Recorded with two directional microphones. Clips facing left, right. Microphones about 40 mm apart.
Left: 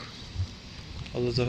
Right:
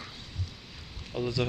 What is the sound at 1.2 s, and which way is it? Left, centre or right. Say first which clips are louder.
Speech: left 3 dB; right.